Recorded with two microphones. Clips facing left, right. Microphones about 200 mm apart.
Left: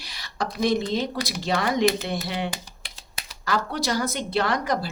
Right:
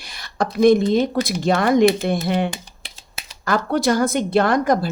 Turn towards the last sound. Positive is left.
turn(degrees=-50)  # may be behind; listen again after turning